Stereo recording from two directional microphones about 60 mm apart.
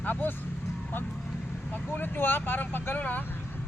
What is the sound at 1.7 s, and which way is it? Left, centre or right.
Speech, left.